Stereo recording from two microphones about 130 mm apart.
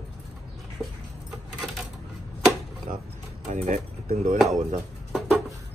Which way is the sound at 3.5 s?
65° right (ahead or behind).